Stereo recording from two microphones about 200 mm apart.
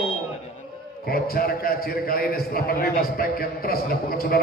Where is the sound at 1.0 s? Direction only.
50° left (ahead or behind).